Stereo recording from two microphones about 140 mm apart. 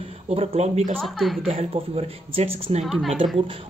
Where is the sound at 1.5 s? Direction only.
50° right (ahead or behind).